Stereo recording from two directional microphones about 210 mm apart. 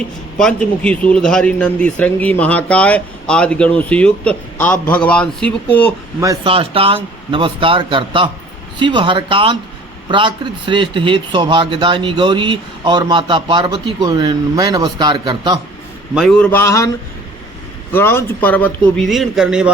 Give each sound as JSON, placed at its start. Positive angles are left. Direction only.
{"t": 0.3, "sound": "speech", "side_deg": 5}
{"t": 6.1, "sound": "speech", "side_deg": -15}
{"t": 16.1, "sound": "a man's voice", "side_deg": 0}
{"t": 17.9, "sound": "a man's voice", "side_deg": 10}